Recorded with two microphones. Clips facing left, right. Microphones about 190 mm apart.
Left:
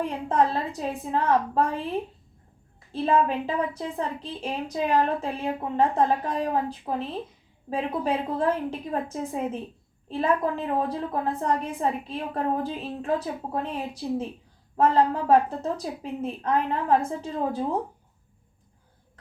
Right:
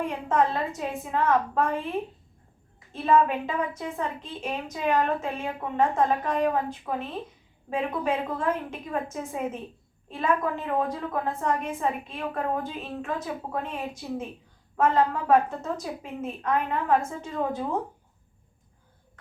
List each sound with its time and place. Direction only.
0.3 s a woman's voice: 35° left (ahead or behind)
2.9 s a woman's voice: 35° left (ahead or behind)